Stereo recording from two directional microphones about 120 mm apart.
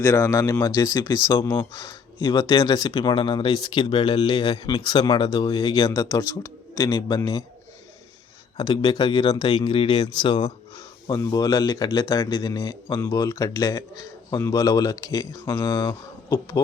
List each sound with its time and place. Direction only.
0.0 s speech: 30° left (ahead or behind)
8.5 s speech: 40° left (ahead or behind)
10.2 s a sound: 40° left (ahead or behind)
11.3 s speech: 30° left (ahead or behind)
15.7 s speech: 40° left (ahead or behind)